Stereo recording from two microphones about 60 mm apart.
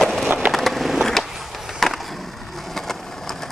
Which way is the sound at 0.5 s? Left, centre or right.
Centre.